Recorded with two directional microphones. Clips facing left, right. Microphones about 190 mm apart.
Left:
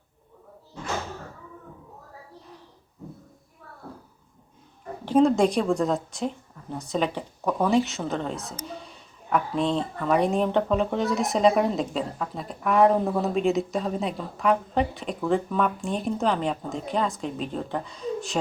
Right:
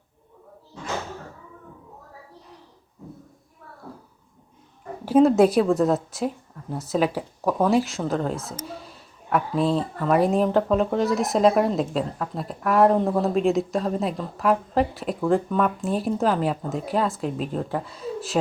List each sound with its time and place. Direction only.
5.0 s a woman's voice: 5° right (ahead or behind)